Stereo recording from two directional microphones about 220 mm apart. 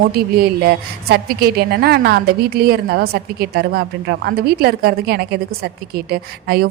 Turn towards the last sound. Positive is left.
turn(degrees=-45)  # may be behind; listen again after turning